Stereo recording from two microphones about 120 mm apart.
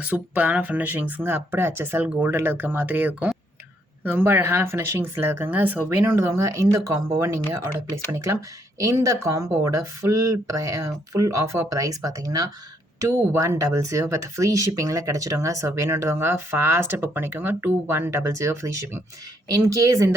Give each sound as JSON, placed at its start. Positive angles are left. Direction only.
{"t": 0.0, "sound": "speech", "side_deg": -15}